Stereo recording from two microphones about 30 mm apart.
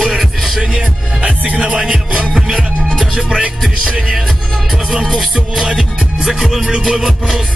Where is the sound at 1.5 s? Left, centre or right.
Right.